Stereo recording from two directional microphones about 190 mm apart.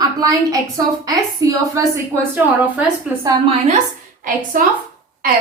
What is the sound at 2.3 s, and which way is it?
Speech, 10° right (ahead or behind).